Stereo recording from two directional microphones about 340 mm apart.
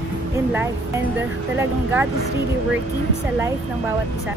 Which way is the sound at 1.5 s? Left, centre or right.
Centre.